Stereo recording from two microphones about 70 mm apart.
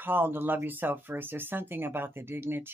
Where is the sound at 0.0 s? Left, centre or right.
Right.